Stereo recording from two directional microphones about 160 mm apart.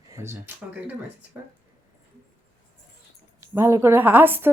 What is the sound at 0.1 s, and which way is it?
Speech, 15° right (ahead or behind).